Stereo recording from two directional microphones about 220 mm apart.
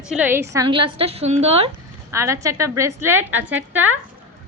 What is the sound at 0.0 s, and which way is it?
Speech, 5° right (ahead or behind).